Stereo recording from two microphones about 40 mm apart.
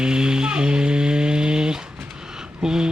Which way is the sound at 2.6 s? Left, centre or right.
Centre.